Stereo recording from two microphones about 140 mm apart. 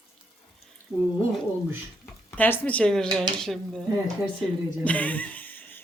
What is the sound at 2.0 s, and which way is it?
Speech, 15° left (ahead or behind).